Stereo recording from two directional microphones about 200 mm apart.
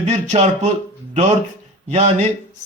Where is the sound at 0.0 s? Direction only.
35° right (ahead or behind).